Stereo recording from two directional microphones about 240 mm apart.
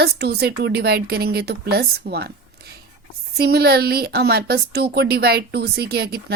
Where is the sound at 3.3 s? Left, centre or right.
Right.